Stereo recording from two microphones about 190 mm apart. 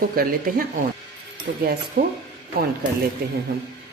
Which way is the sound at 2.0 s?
50° right (ahead or behind).